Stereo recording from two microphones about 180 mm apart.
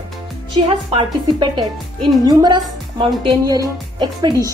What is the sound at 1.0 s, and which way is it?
A woman's voice, 25° right (ahead or behind).